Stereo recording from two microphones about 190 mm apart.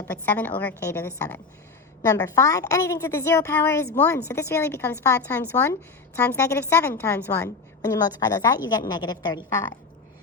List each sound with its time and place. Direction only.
0.1 s a woman's voice: 10° left (ahead or behind)